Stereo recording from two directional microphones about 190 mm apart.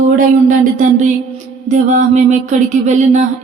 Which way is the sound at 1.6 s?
40° right (ahead or behind).